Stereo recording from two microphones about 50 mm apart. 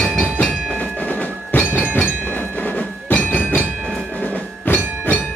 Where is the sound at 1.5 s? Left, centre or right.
Left.